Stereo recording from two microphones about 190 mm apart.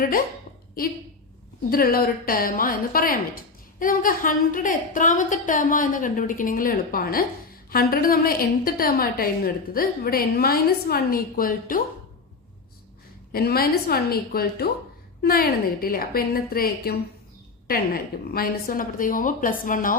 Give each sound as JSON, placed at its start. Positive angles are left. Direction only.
{"t": 1.7, "sound": "a woman's voice", "side_deg": 50}
{"t": 13.3, "sound": "a woman's voice", "side_deg": 55}
{"t": 18.3, "sound": "a woman's voice", "side_deg": 50}